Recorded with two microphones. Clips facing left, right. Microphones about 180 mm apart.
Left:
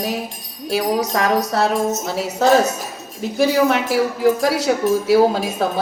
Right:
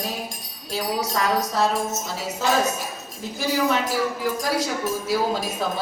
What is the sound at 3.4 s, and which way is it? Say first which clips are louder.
Speech: left 7 dB; 70° left (ahead or behind).